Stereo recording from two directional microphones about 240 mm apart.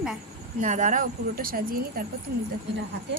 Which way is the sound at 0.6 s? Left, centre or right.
Right.